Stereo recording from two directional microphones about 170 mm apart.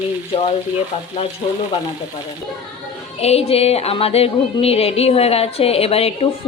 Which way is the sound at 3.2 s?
35° left (ahead or behind).